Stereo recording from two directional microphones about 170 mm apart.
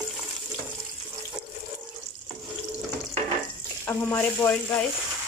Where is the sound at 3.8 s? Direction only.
15° left (ahead or behind).